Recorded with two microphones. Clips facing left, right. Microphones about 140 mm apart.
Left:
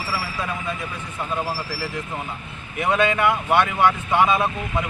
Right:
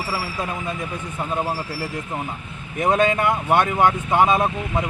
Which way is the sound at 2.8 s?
45° right (ahead or behind).